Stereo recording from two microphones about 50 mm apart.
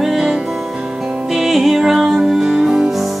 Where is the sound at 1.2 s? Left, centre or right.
Centre.